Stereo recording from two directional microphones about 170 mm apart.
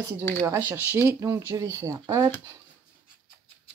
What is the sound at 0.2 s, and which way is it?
Speech, 10° left (ahead or behind).